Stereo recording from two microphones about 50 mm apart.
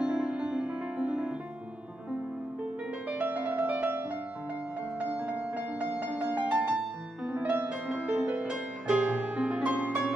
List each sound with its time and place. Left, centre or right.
0.0 s music: right
3.1 s music: right
5.8 s music: right